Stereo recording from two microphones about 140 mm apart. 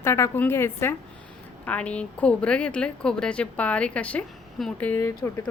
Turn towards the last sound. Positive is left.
turn(degrees=20)  # may be behind; listen again after turning